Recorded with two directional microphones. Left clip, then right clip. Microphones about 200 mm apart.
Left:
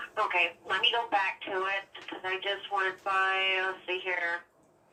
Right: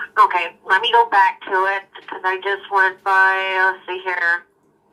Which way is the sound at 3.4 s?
50° right (ahead or behind).